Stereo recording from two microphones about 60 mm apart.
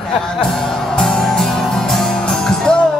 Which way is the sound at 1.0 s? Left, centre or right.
Centre.